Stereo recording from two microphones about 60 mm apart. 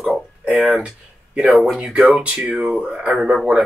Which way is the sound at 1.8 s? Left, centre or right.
Right.